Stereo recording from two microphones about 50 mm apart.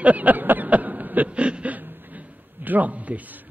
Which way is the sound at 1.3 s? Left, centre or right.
Right.